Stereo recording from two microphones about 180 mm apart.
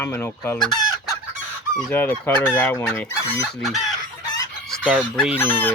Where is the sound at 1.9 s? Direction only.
10° left (ahead or behind).